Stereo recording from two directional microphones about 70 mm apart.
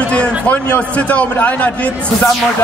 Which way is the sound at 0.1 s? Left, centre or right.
Centre.